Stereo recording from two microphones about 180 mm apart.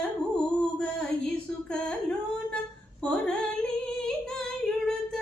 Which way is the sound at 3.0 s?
5° left (ahead or behind).